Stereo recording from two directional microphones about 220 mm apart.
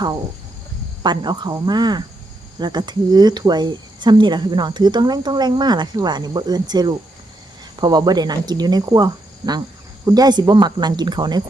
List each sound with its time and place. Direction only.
1.0 s speech: 20° right (ahead or behind)